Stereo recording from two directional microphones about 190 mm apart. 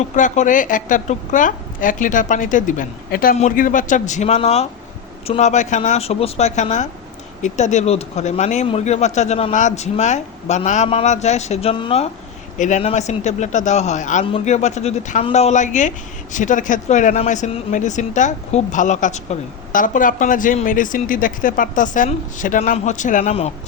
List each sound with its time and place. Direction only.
0.0 s a woman's voice: 40° left (ahead or behind)